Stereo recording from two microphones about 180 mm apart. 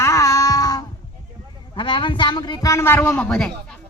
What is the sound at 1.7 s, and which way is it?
A man's voice, 25° left (ahead or behind).